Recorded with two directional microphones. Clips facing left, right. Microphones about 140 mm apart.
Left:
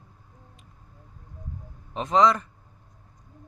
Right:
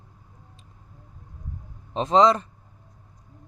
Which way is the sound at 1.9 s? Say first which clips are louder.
Right 3 dB; 30° right (ahead or behind).